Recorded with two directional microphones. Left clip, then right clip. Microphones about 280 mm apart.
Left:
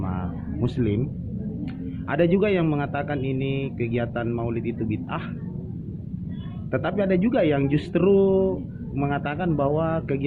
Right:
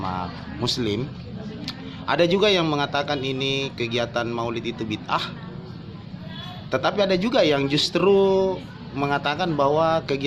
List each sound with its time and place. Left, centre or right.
0.0 s a sound: centre
0.8 s a man's voice: centre
6.7 s speech: centre